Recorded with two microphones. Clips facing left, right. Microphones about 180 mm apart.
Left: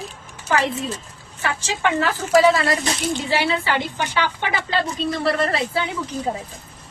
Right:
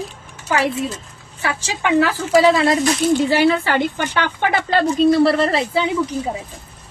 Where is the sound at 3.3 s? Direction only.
50° right (ahead or behind).